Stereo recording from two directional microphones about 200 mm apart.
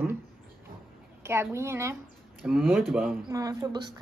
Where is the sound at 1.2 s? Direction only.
15° right (ahead or behind).